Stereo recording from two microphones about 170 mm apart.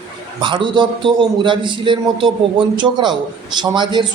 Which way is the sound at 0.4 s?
30° right (ahead or behind).